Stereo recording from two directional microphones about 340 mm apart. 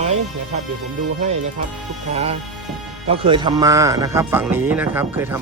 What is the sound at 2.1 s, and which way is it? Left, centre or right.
Speech, centre.